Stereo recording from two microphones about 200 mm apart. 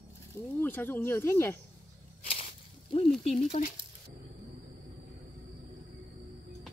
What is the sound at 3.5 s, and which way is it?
Speech, 40° left (ahead or behind).